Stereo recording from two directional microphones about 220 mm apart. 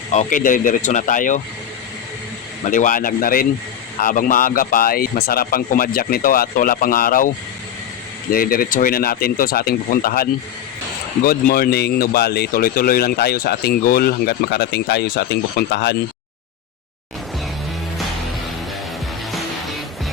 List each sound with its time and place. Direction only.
0.1 s speech: 35° left (ahead or behind)
2.6 s speech: 35° left (ahead or behind)
8.3 s speech: 40° left (ahead or behind)
19.3 s music: centre (ahead or behind)